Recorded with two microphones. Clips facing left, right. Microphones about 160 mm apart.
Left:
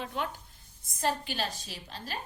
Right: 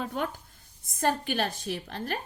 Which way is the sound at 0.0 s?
45° right (ahead or behind).